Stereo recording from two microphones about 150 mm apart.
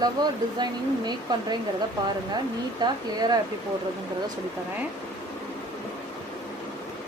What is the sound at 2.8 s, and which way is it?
Speech, 25° right (ahead or behind).